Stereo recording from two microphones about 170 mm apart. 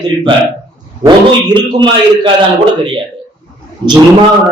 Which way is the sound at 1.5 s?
30° right (ahead or behind).